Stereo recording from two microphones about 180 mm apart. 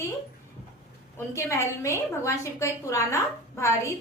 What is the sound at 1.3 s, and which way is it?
A woman's voice, 15° left (ahead or behind).